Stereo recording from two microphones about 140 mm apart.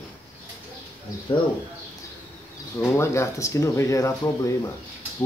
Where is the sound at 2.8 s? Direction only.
20° left (ahead or behind).